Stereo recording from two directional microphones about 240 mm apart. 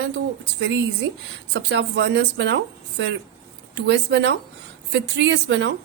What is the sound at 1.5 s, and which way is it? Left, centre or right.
Speech, right.